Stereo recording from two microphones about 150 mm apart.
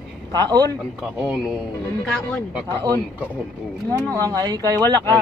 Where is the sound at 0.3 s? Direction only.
25° right (ahead or behind).